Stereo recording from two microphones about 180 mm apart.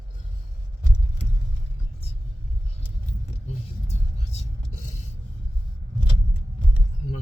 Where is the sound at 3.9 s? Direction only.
35° left (ahead or behind).